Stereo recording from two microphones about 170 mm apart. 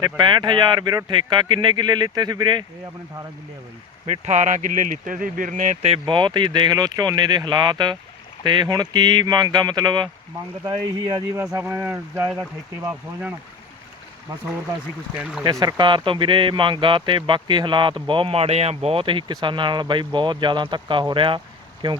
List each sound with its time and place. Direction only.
0.0 s speech: 25° right (ahead or behind)
4.0 s speech: 40° right (ahead or behind); by 12.3 s 10° right (ahead or behind)
15.1 s speech: 5° right (ahead or behind)
15.4 s speech: 25° right (ahead or behind)